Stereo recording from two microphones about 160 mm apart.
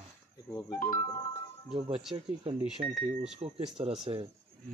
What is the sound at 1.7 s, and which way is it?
Speech, 35° right (ahead or behind).